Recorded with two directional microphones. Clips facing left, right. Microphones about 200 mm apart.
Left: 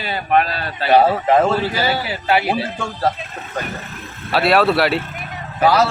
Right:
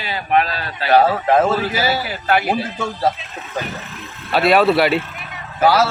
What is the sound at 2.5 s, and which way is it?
Speech, 10° right (ahead or behind).